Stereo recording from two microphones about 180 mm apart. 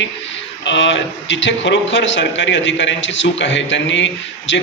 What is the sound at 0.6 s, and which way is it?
A man's voice, 90° left.